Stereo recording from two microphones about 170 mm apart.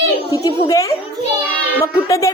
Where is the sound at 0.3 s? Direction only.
20° left (ahead or behind).